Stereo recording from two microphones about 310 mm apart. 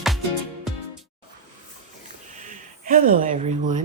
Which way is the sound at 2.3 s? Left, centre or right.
Right.